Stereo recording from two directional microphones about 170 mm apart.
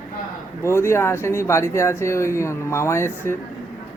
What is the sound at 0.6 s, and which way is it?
Speech, 15° left (ahead or behind).